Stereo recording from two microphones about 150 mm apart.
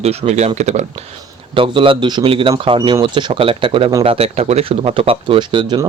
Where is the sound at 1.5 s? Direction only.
35° right (ahead or behind).